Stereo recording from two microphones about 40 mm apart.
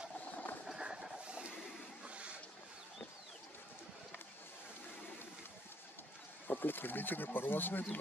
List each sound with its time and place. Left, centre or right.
0.6 s train: centre
2.0 s a sound: right
6.5 s speech: left